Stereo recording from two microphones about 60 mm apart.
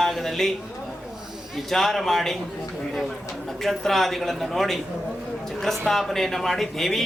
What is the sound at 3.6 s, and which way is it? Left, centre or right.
Speech, centre.